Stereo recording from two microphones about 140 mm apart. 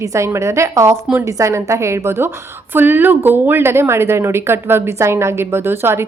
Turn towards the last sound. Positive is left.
turn(degrees=-15)  # may be behind; listen again after turning